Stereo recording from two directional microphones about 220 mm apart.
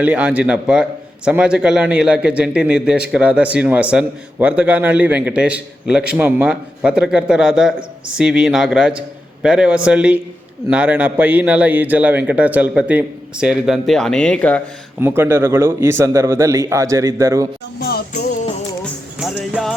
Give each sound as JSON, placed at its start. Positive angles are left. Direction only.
{"t": 0.0, "sound": "a man's voice", "side_deg": -5}
{"t": 15.0, "sound": "a man's voice", "side_deg": -10}
{"t": 17.7, "sound": "music", "side_deg": 45}
{"t": 19.2, "sound": "music", "side_deg": 0}